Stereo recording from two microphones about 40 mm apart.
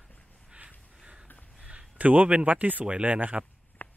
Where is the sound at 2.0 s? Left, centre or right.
Right.